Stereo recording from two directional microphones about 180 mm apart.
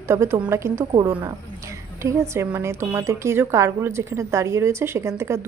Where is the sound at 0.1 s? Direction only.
15° right (ahead or behind).